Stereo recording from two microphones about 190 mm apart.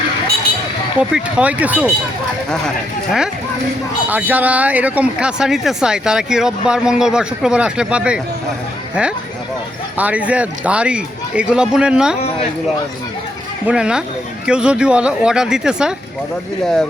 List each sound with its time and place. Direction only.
1.1 s speech: 5° right (ahead or behind)
4.1 s speech: 10° right (ahead or behind)
10.0 s speech: 5° right (ahead or behind)
13.7 s speech: 5° right (ahead or behind)